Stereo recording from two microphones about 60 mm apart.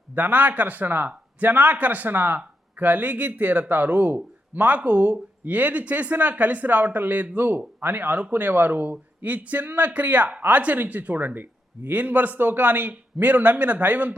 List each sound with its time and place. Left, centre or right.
0.1 s speech: right